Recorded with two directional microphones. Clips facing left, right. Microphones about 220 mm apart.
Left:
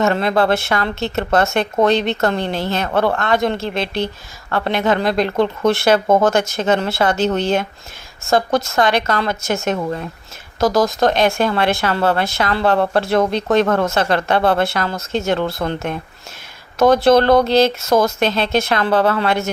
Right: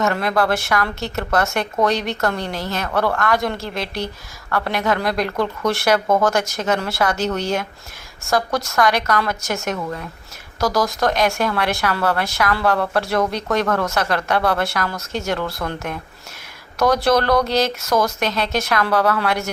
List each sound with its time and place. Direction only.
0.0 s speech: 25° left (ahead or behind)